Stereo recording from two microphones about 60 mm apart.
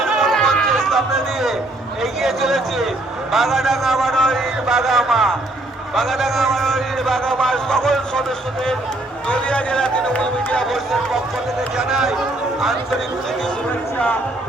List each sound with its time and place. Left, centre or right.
0.2 s music: centre
2.0 s a man's voice: centre
4.6 s a man's voice: centre
9.2 s speech: centre
11.8 s speech: centre